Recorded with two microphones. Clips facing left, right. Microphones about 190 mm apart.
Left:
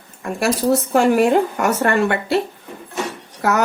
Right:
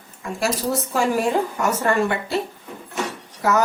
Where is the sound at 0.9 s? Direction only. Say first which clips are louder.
Left 6 dB; 65° left (ahead or behind).